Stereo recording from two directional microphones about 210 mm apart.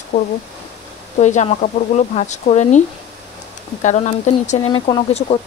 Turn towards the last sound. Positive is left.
turn(degrees=25)  # may be behind; listen again after turning